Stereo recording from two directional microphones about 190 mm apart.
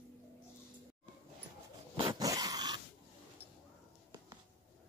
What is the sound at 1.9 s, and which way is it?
Dog, 20° right (ahead or behind).